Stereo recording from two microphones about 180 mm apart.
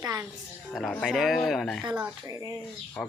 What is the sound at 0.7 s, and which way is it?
Speech, 5° left (ahead or behind).